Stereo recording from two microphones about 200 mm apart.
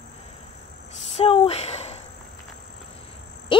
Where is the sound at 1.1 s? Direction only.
30° left (ahead or behind).